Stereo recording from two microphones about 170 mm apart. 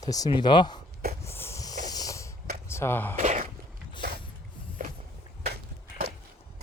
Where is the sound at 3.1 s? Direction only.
45° right (ahead or behind).